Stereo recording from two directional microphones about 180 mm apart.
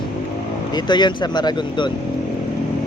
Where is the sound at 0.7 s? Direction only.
25° left (ahead or behind).